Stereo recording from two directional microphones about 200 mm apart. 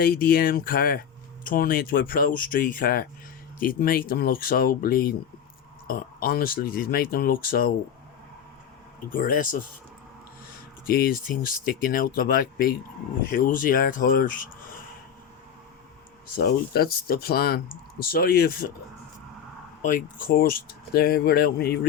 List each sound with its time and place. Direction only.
0.0 s speech: 50° left (ahead or behind)
9.1 s speech: 45° left (ahead or behind)
11.1 s speech: 45° left (ahead or behind)
16.4 s speech: 50° left (ahead or behind)
19.8 s speech: 40° left (ahead or behind)